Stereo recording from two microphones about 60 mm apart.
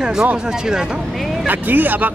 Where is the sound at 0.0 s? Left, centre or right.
Centre.